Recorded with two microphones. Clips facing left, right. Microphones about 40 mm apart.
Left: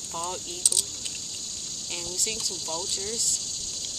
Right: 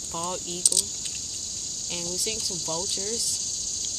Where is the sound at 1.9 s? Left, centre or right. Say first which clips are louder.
Right 1 dB; centre.